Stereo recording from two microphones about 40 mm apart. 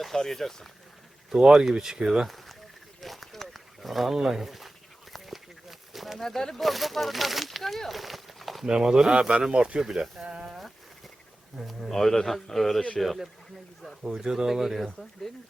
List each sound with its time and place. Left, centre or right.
0.0 s a man's voice: centre
1.4 s speech: centre
2.2 s a sound: centre
4.2 s speech: centre
5.1 s a sound: centre
6.1 s a man's voice: centre
6.6 s speech: centre
8.6 s speech: centre
9.5 s speech: right
9.9 s speech: centre
10.2 s speech: right
11.9 s a man's voice: centre
14.0 s speech: centre